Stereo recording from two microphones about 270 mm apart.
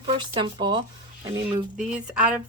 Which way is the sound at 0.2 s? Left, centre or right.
Centre.